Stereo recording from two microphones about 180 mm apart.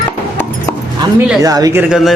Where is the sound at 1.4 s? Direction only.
20° right (ahead or behind).